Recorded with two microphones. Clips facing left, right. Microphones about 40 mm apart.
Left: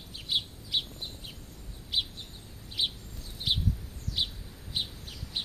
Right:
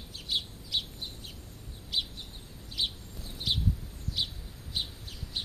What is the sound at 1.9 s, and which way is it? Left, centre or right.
Bird, centre.